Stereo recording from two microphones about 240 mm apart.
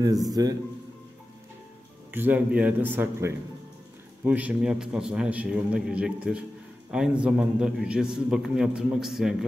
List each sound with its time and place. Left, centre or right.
0.3 s a man's voice: centre
2.0 s a man's voice: centre